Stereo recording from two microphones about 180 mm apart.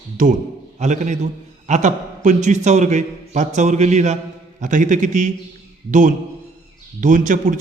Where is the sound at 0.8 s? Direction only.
40° right (ahead or behind).